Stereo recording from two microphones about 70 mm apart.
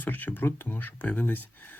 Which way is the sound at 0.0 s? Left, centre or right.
Left.